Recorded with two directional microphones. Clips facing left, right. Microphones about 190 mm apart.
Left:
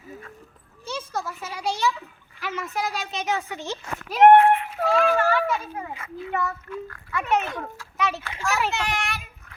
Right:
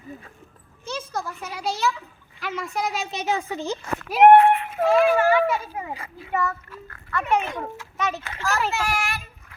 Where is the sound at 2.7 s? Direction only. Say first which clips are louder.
Right 2 dB; 5° left (ahead or behind).